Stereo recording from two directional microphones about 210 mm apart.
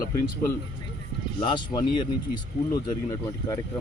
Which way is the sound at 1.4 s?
20° left (ahead or behind).